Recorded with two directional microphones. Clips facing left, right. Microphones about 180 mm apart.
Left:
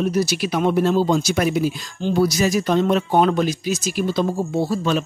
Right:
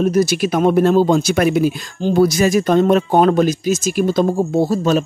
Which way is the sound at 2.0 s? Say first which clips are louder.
Right 5 dB; 45° right (ahead or behind).